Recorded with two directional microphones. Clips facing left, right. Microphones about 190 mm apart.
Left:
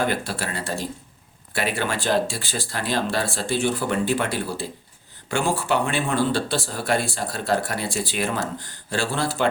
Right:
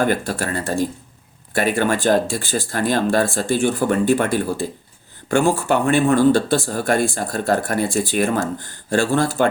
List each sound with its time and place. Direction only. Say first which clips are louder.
0.0 s speech: right 5 dB; 45° right (ahead or behind)